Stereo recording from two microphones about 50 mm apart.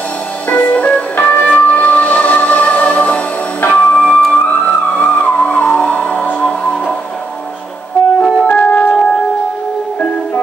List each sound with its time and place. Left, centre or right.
0.5 s music: left
8.2 s music: left